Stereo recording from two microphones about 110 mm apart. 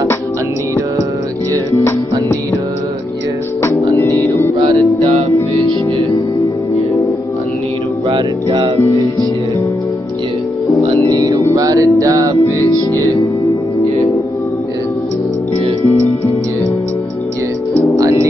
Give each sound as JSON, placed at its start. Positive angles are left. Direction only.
{"t": 4.1, "sound": "mantra", "side_deg": 25}
{"t": 8.1, "sound": "music", "side_deg": -45}
{"t": 11.1, "sound": "music", "side_deg": -35}